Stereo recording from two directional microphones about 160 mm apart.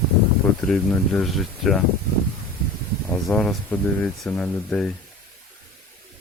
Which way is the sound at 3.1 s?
5° left (ahead or behind).